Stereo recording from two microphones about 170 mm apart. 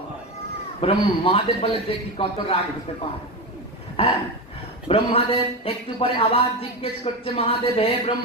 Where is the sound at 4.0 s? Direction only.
35° left (ahead or behind).